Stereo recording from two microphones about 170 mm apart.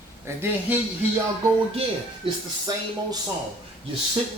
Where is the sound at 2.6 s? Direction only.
25° right (ahead or behind).